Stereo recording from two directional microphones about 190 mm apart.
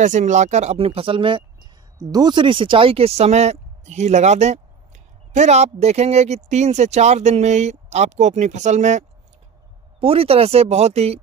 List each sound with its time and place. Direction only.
0.0 s speech: 40° right (ahead or behind)